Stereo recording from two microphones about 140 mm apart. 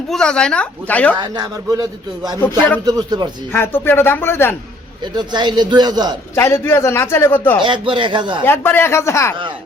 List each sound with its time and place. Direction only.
0.1 s a man's voice: 5° left (ahead or behind)
1.2 s speech: 30° right (ahead or behind)
3.5 s a man's voice: 15° left (ahead or behind)
5.1 s speech: 30° right (ahead or behind)
6.3 s a man's voice: 20° left (ahead or behind)
7.6 s speech: 35° right (ahead or behind)
8.4 s a man's voice: 15° left (ahead or behind)